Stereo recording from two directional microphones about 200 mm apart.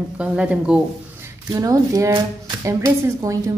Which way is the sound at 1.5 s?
15° right (ahead or behind).